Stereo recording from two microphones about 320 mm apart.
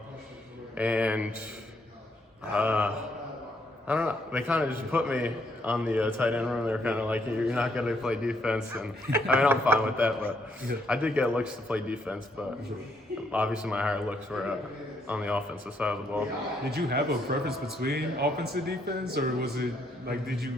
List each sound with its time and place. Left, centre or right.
0.8 s a man's voice: centre
2.4 s a man's voice: centre
13.3 s a man's voice: centre
16.6 s speech: right